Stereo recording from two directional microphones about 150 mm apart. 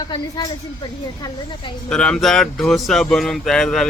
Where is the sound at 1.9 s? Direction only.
5° left (ahead or behind).